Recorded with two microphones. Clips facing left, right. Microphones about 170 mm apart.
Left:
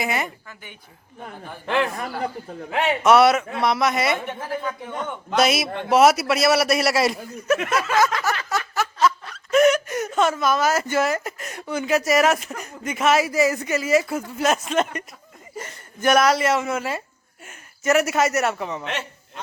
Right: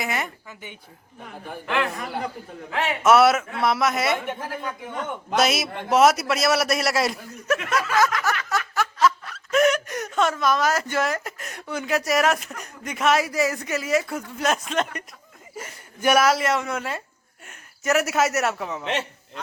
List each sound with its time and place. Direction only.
0.0 s a man's voice: centre (ahead or behind)
0.4 s speech: 20° right (ahead or behind)
1.6 s a man's voice: 30° left (ahead or behind)
3.0 s a man's voice: centre (ahead or behind)
8.1 s a man's voice: 30° left (ahead or behind)
8.4 s a man's voice: centre (ahead or behind)